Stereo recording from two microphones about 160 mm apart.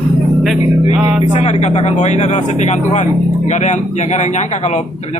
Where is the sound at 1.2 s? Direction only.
45° left (ahead or behind).